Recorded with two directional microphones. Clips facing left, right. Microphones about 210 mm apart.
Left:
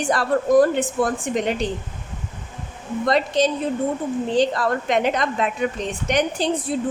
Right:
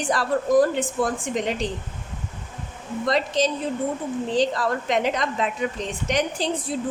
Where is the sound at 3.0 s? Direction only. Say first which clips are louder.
Left 3 dB; 55° left (ahead or behind).